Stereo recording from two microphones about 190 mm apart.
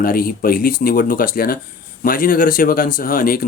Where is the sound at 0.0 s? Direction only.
50° left (ahead or behind).